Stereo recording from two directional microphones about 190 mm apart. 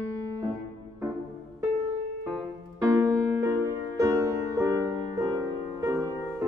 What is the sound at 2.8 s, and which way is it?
Music, 15° right (ahead or behind).